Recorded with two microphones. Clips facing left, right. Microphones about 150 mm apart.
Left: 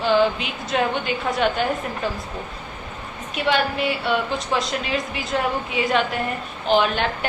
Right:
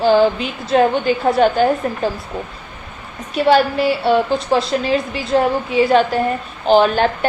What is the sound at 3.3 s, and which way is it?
A woman's voice, 35° right (ahead or behind).